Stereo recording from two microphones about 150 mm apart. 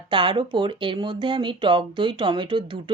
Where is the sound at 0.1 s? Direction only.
35° right (ahead or behind).